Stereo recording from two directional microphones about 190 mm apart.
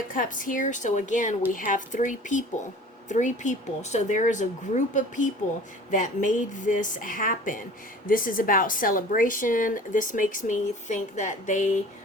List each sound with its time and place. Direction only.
0.1 s a woman's voice: 45° left (ahead or behind)